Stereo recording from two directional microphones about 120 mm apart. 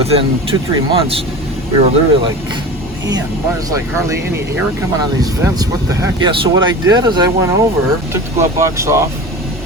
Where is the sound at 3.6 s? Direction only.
25° right (ahead or behind).